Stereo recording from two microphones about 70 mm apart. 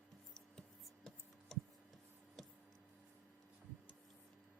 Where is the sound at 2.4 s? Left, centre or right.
Centre.